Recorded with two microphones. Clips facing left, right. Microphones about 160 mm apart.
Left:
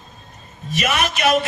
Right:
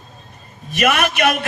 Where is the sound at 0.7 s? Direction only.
60° right (ahead or behind).